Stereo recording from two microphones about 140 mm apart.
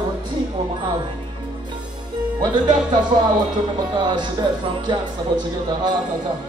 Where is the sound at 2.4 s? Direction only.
35° right (ahead or behind).